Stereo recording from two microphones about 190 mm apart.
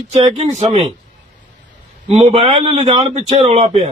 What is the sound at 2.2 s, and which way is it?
Speech, 30° right (ahead or behind).